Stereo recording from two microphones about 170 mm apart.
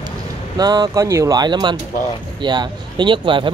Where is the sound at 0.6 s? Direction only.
20° right (ahead or behind).